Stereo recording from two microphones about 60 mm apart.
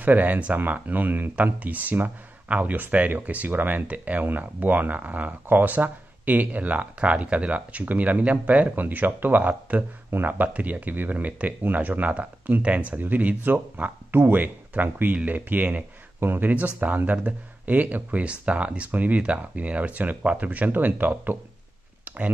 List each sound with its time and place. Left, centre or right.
0.0 s speech: right